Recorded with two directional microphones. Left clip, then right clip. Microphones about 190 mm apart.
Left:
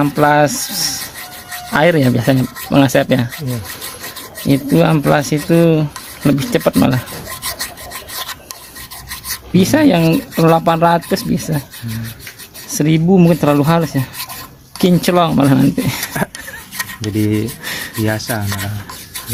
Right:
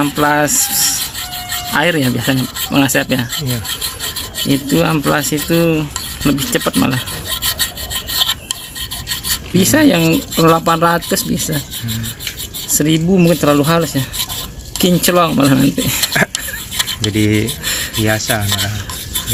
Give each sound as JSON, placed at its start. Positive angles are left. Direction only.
{"t": 0.0, "sound": "rub", "side_deg": 45}
{"t": 4.4, "sound": "rub", "side_deg": 45}
{"t": 9.6, "sound": "speech", "side_deg": 35}
{"t": 12.7, "sound": "speech", "side_deg": 35}
{"t": 17.2, "sound": "speech", "side_deg": 0}
{"t": 18.0, "sound": "rub", "side_deg": 10}